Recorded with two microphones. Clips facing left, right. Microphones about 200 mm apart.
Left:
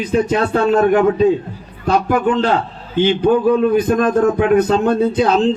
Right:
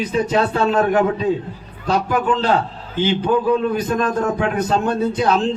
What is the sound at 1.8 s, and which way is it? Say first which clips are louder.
Speech: left 4 dB; 55° left (ahead or behind).